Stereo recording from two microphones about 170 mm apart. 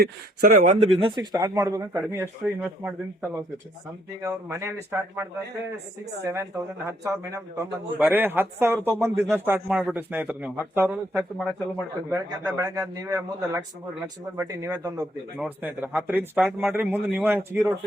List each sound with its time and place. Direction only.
0.0 s speech: 55° right (ahead or behind)
0.9 s a man's voice: 30° right (ahead or behind); by 10.9 s 10° right (ahead or behind)
11.1 s speech: centre (ahead or behind)
12.1 s a man's voice: 20° right (ahead or behind)
15.4 s a man's voice: 10° right (ahead or behind)